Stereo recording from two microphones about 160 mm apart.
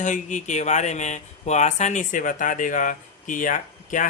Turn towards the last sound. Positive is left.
turn(degrees=55)  # may be behind; listen again after turning